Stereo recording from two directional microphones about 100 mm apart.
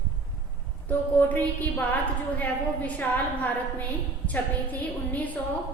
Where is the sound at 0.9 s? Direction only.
15° left (ahead or behind).